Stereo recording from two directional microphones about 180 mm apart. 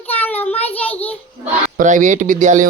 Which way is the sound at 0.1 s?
10° left (ahead or behind).